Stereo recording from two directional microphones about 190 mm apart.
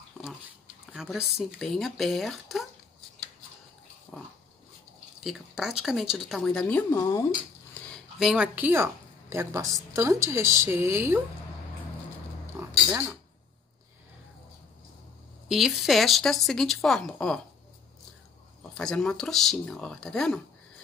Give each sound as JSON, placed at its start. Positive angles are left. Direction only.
{"t": 0.9, "sound": "a woman's voice", "side_deg": -5}
{"t": 4.1, "sound": "dog", "side_deg": 0}
{"t": 5.2, "sound": "a woman's voice", "side_deg": 0}
{"t": 7.9, "sound": "speech", "side_deg": 0}
{"t": 12.6, "sound": "a sound", "side_deg": -15}
{"t": 15.4, "sound": "a woman's voice", "side_deg": 0}
{"t": 18.6, "sound": "a woman's voice", "side_deg": 5}